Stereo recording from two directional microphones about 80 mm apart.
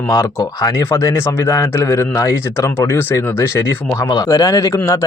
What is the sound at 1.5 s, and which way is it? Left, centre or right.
Speech, left.